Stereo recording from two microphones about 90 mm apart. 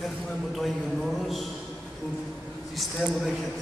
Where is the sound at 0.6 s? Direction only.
Centre (ahead or behind).